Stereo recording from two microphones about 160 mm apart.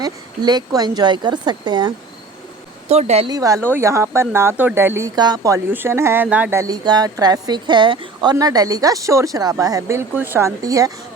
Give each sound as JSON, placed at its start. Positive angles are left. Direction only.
{"t": 0.0, "sound": "a woman's voice", "side_deg": -25}
{"t": 2.9, "sound": "speech", "side_deg": -40}
{"t": 3.2, "sound": "speech", "side_deg": -20}
{"t": 6.6, "sound": "a woman's voice", "side_deg": -25}